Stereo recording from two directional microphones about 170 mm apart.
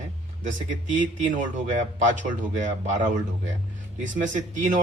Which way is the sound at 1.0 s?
45° right (ahead or behind).